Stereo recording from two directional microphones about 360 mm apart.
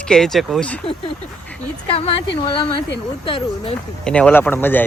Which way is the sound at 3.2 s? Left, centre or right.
Centre.